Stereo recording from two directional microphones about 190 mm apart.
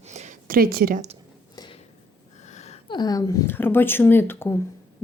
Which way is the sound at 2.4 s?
35° left (ahead or behind).